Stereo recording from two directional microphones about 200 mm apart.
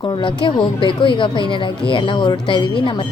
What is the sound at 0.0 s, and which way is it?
A woman's voice, 25° left (ahead or behind).